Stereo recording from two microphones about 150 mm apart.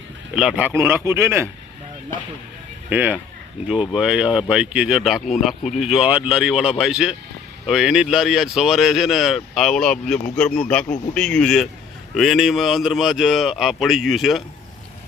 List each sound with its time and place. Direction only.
0.3 s speech: 10° right (ahead or behind)
2.9 s speech: 10° right (ahead or behind)